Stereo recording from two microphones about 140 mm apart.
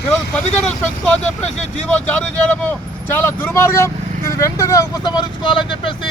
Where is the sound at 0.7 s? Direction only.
10° left (ahead or behind); by 5.9 s 35° left (ahead or behind).